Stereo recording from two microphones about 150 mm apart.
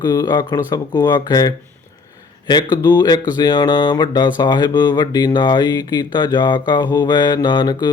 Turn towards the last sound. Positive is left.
turn(degrees=30)  # may be behind; listen again after turning